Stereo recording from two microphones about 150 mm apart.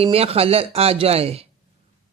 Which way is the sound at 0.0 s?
40° right (ahead or behind).